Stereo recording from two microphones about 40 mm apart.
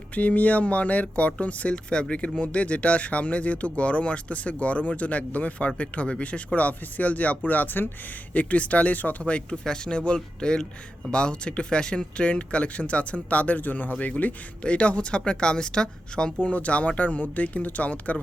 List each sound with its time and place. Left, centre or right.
0.1 s speech: left
8.3 s speech: left
9.2 s speech: left
16.4 s speech: left